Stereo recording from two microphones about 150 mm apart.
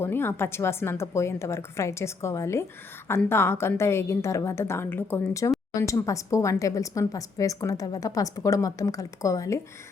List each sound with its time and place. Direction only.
0.0 s a woman's voice: 15° left (ahead or behind)